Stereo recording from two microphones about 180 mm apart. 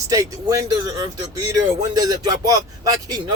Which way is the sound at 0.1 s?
20° right (ahead or behind).